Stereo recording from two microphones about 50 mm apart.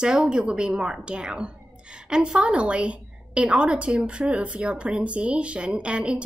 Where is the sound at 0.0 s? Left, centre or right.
Centre.